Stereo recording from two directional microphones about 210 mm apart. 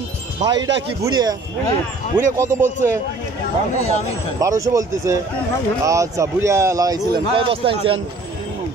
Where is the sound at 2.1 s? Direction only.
10° right (ahead or behind).